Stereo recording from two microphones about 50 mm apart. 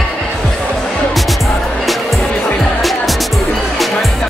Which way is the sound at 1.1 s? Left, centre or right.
Centre.